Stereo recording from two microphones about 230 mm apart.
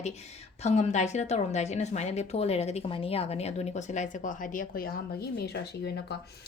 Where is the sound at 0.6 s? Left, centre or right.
Left.